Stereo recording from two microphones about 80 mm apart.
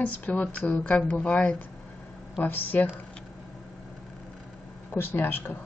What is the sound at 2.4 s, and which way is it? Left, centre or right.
Speech, left.